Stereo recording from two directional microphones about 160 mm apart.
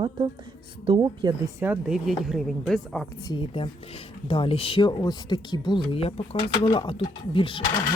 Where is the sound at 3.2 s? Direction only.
30° left (ahead or behind).